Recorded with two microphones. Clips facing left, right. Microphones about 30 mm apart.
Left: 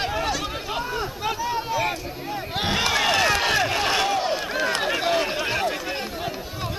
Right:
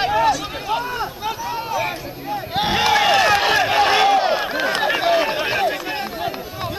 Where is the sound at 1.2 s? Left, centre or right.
Centre.